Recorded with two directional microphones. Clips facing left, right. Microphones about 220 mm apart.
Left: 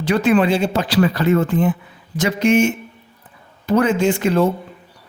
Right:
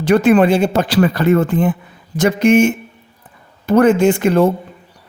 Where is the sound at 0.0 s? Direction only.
50° right (ahead or behind).